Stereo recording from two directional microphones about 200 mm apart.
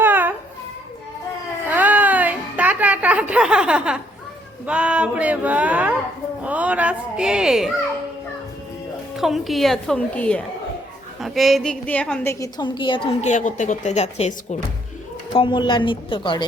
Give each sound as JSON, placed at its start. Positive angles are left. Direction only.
{"t": 0.0, "sound": "baby cry", "side_deg": -10}
{"t": 1.7, "sound": "music", "side_deg": -10}
{"t": 4.6, "sound": "speech", "side_deg": -5}
{"t": 6.4, "sound": "a sound", "side_deg": -5}
{"t": 9.1, "sound": "a woman's voice", "side_deg": 0}